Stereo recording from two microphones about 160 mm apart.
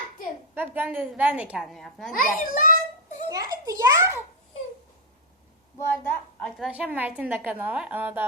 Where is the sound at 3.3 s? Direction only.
20° right (ahead or behind).